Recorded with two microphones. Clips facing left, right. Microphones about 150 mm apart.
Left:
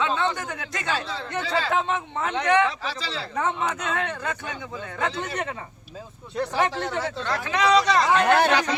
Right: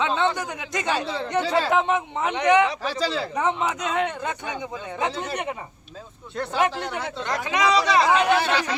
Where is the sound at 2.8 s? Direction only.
45° right (ahead or behind).